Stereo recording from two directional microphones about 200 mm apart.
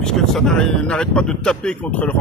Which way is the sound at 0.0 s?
5° left (ahead or behind).